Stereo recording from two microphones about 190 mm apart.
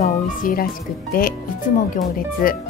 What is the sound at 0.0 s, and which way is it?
Music, 45° left (ahead or behind).